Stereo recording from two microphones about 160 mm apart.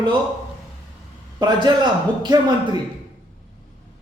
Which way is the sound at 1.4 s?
25° right (ahead or behind).